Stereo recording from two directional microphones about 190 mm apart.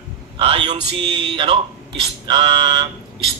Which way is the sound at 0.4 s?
30° right (ahead or behind).